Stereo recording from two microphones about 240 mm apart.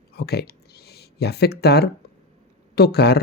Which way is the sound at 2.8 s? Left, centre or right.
Left.